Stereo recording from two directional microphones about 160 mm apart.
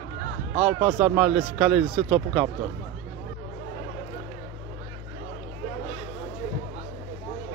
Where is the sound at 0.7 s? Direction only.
40° right (ahead or behind).